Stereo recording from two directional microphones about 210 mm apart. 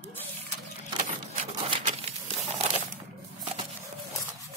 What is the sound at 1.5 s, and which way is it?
Crumpling, 25° right (ahead or behind).